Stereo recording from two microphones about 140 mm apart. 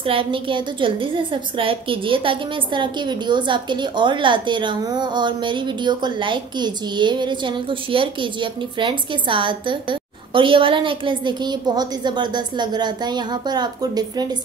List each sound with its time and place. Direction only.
0.0 s a woman's voice: 40° right (ahead or behind)